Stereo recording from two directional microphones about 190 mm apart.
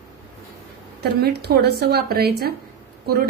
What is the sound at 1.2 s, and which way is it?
A woman's voice, 60° right (ahead or behind).